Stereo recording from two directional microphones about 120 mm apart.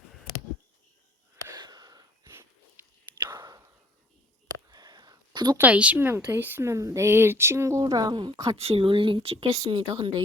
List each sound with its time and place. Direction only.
1.5 s wheeze: 35° right (ahead or behind)
3.2 s whispering: 35° right (ahead or behind)
4.7 s a sound: 35° right (ahead or behind)
5.5 s speech: 10° right (ahead or behind)
7.9 s a woman's voice: 35° right (ahead or behind)
8.5 s speech: 55° right (ahead or behind)